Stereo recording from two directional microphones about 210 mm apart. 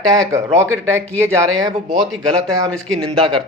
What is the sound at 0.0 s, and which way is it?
Speech, 15° right (ahead or behind).